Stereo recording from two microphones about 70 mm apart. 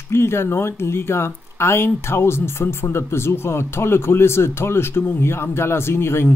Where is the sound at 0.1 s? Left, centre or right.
Left.